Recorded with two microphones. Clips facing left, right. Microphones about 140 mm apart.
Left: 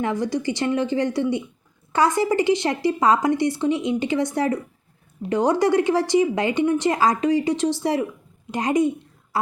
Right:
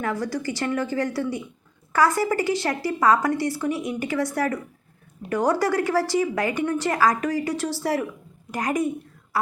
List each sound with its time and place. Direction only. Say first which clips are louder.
0.0 s a woman's voice: left 3 dB; 20° left (ahead or behind)